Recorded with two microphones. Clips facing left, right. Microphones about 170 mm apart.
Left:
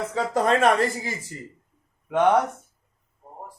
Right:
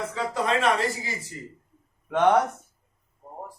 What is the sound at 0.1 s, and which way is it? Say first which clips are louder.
Speech: left 6 dB; 45° left (ahead or behind).